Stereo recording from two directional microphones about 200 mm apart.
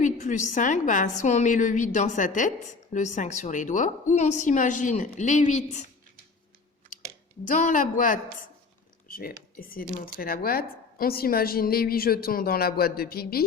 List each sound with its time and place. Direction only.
0.0 s a woman's voice: 40° left (ahead or behind)
7.4 s a woman's voice: 40° left (ahead or behind)